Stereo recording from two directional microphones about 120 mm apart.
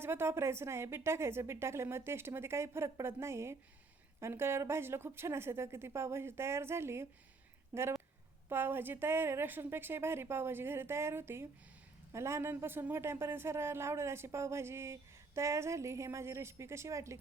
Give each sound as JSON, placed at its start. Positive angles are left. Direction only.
{"t": 0.0, "sound": "a woman's voice", "side_deg": -20}